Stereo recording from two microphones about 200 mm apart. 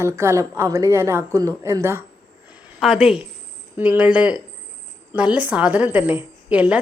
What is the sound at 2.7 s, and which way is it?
A woman's voice, centre (ahead or behind).